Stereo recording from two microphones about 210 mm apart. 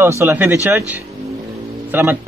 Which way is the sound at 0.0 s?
10° right (ahead or behind).